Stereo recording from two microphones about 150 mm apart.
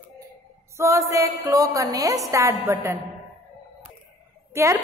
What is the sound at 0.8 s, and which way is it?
A woman's voice, 20° right (ahead or behind).